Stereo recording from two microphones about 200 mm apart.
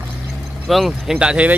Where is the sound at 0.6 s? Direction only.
Centre (ahead or behind).